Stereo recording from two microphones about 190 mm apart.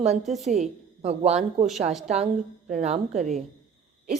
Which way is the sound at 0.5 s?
35° right (ahead or behind).